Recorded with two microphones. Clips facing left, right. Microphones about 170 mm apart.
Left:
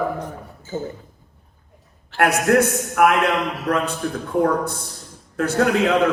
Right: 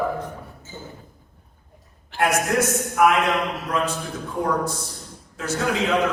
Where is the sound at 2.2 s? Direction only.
65° left (ahead or behind).